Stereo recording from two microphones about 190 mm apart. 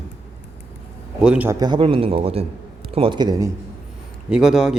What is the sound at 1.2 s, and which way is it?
Speech, 5° right (ahead or behind).